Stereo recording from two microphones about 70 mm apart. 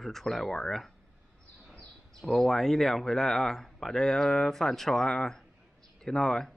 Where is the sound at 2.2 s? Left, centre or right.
Centre.